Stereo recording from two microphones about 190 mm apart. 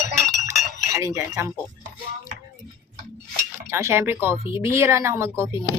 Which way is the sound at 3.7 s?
15° right (ahead or behind).